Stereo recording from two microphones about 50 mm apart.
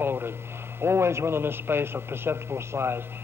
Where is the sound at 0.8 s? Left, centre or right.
Right.